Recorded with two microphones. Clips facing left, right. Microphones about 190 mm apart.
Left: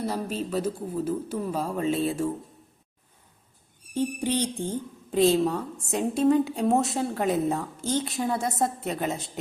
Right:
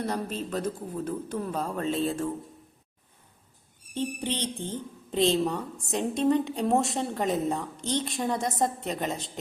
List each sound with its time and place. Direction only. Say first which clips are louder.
0.0 s speech: left 2 dB; 5° left (ahead or behind)
4.6 s a woman's voice: left 4 dB; 10° left (ahead or behind)